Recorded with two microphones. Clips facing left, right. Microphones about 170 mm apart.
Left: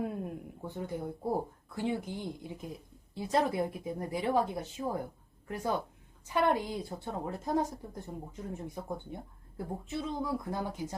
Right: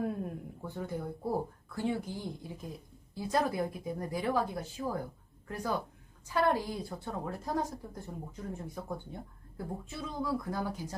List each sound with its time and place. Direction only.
0.0 s a sound: 20° left (ahead or behind)
1.7 s speech: 20° left (ahead or behind)
6.2 s speech: 20° left (ahead or behind)